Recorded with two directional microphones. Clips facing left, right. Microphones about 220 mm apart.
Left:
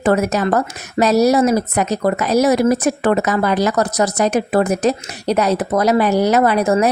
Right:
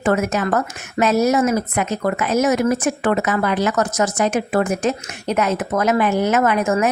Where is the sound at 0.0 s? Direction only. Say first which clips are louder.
Left 3 dB; 35° left (ahead or behind).